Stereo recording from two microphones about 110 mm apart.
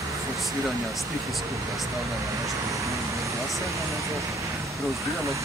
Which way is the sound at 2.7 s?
30° right (ahead or behind).